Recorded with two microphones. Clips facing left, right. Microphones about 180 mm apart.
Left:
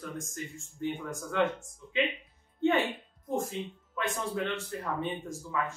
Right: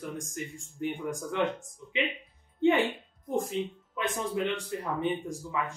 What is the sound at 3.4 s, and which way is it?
Speech, 20° right (ahead or behind).